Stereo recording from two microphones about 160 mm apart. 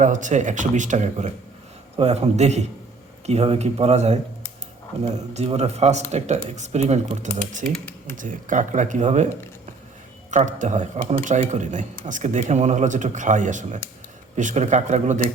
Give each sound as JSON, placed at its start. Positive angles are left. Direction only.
{"t": 0.0, "sound": "speech", "side_deg": -50}
{"t": 7.6, "sound": "speech", "side_deg": 0}
{"t": 8.1, "sound": "speech", "side_deg": -55}
{"t": 10.3, "sound": "speech", "side_deg": -50}